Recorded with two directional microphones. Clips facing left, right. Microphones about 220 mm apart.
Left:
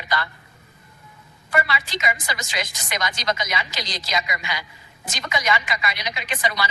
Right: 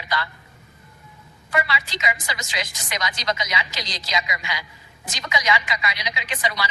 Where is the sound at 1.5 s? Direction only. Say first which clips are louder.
Left 1 dB; 55° left (ahead or behind).